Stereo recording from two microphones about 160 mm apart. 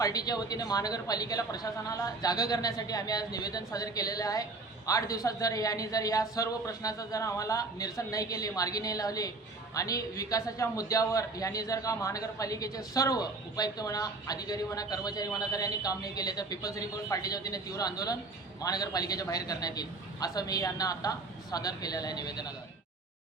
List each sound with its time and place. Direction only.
0.0 s a man's voice: 25° left (ahead or behind)